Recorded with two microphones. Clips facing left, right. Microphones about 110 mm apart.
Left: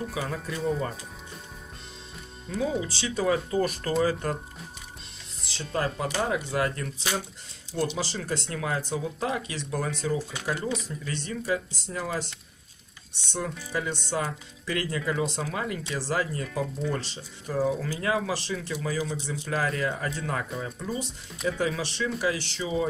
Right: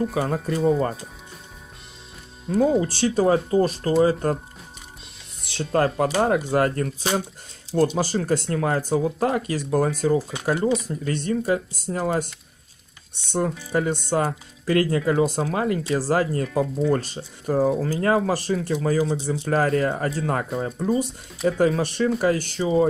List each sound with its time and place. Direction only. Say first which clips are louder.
0.1 s speech: right 8 dB; 45° right (ahead or behind)
2.4 s speech: right 9 dB; 50° right (ahead or behind)
5.4 s speech: right 8 dB; 55° right (ahead or behind)